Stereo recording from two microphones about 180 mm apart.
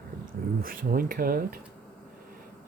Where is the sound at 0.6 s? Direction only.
55° right (ahead or behind).